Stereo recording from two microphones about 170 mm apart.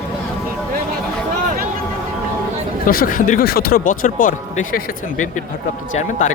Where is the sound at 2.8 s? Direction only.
55° left (ahead or behind).